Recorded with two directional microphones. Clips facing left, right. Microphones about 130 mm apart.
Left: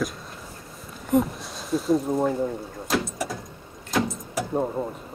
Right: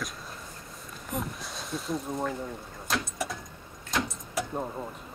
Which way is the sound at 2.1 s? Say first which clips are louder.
Left 9 dB; 30° left (ahead or behind).